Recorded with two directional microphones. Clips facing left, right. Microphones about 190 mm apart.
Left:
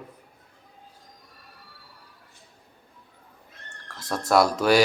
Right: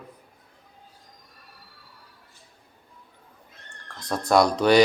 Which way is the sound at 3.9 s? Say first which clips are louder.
Right 1 dB; 5° left (ahead or behind).